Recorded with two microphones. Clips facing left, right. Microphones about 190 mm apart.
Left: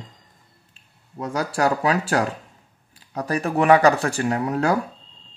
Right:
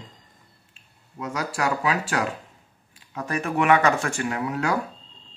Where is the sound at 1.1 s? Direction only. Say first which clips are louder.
Left 4 dB; 35° left (ahead or behind).